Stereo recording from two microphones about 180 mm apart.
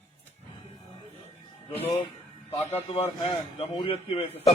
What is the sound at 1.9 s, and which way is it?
A man's voice, 30° left (ahead or behind).